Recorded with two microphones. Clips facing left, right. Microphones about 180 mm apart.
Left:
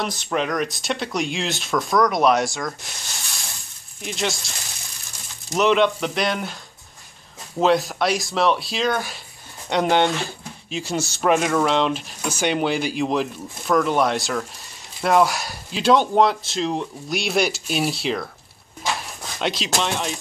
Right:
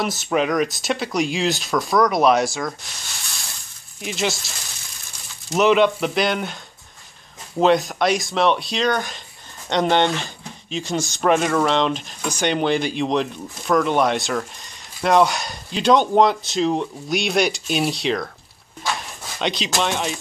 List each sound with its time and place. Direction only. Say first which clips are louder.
0.0 s speech: right 3 dB; 5° right (ahead or behind)
4.0 s speech: right 2 dB; centre (ahead or behind)
5.5 s speech: right 2 dB; 5° right (ahead or behind)
19.3 s speech: right 1 dB; centre (ahead or behind)